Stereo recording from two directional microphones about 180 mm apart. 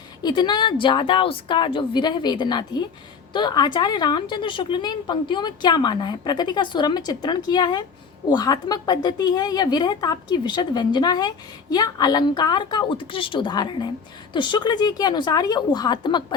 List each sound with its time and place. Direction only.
0.2 s a woman's voice: 25° left (ahead or behind)